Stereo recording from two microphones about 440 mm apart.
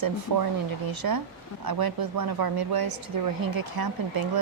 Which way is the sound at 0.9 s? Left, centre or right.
Right.